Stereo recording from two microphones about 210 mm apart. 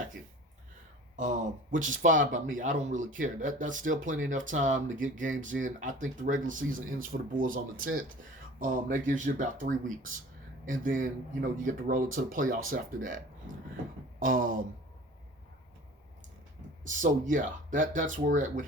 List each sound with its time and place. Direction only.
1.1 s speech: 35° right (ahead or behind)
16.8 s speech: 40° right (ahead or behind)